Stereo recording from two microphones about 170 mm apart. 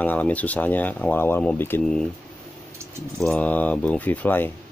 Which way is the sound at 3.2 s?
10° left (ahead or behind).